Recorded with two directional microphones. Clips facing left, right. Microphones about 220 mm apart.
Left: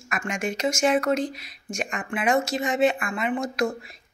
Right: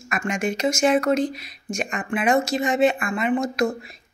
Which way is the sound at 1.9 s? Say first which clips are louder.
Right 3 dB; 35° right (ahead or behind).